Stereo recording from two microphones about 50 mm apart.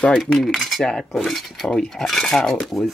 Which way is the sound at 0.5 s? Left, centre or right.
Centre.